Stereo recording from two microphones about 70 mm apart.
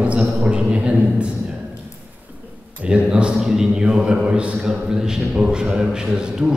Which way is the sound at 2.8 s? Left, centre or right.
Centre.